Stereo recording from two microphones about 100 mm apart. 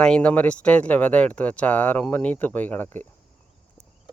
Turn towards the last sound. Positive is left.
turn(degrees=15)  # may be behind; listen again after turning